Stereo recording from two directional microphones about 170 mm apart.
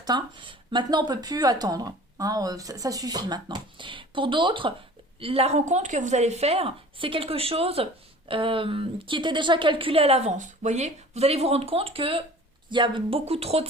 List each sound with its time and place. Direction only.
0.0 s a woman's voice: 25° right (ahead or behind)